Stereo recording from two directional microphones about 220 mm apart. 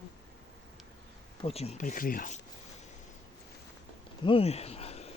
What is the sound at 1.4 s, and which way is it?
Speech, 25° left (ahead or behind).